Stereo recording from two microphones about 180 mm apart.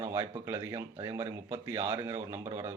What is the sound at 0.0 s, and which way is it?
Speech, 15° right (ahead or behind).